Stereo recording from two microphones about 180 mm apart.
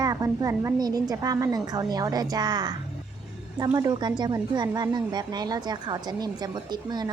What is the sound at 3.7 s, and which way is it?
A woman's voice, 20° right (ahead or behind).